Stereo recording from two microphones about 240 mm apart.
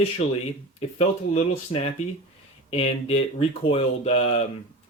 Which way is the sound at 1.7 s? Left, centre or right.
Left.